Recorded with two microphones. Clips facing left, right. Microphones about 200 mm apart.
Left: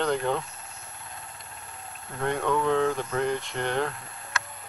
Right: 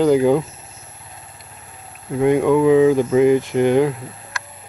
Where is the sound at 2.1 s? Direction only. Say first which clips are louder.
Right 12 dB; 5° right (ahead or behind).